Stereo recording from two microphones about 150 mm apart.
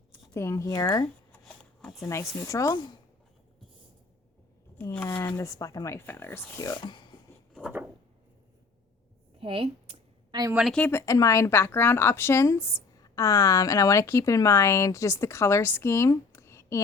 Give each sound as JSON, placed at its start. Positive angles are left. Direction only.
{"t": 0.1, "sound": "speech", "side_deg": 20}
{"t": 1.3, "sound": "shuffling cards", "side_deg": 10}
{"t": 2.0, "sound": "speech", "side_deg": 20}
{"t": 4.8, "sound": "speech", "side_deg": 10}
{"t": 5.4, "sound": "speech", "side_deg": 20}
{"t": 9.4, "sound": "a sound", "side_deg": -35}
{"t": 10.5, "sound": "speech", "side_deg": -5}
{"t": 10.8, "sound": "speech", "side_deg": 10}
{"t": 11.0, "sound": "speech", "side_deg": 20}